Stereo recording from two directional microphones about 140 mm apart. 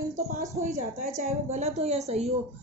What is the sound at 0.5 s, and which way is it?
A woman's voice, 60° right (ahead or behind).